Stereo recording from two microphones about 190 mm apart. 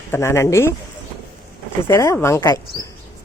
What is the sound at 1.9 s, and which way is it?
Speech, 15° left (ahead or behind).